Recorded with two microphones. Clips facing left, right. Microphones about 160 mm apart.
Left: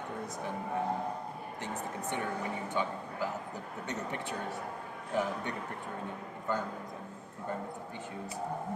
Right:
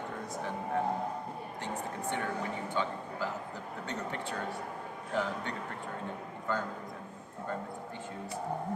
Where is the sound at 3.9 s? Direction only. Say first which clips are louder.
Even; 20° left (ahead or behind).